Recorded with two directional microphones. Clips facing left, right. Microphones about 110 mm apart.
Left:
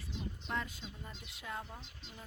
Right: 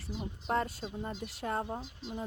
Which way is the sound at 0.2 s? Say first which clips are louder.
Right 8 dB; 45° right (ahead or behind).